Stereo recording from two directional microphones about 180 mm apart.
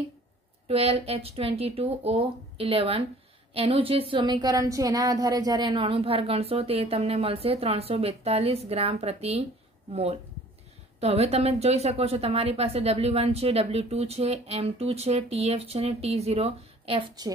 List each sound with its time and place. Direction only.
0.7 s a woman's voice: 35° right (ahead or behind)
11.0 s a woman's voice: 35° right (ahead or behind)